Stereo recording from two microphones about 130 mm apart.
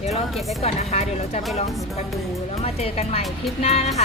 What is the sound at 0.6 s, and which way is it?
Speech, 55° left (ahead or behind).